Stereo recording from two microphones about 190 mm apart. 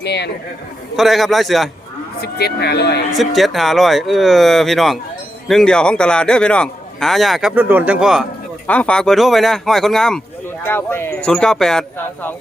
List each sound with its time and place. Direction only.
0.0 s speech: 60° left (ahead or behind)
0.9 s a man's voice: centre (ahead or behind)
2.2 s speech: 60° left (ahead or behind)
3.2 s a man's voice: centre (ahead or behind)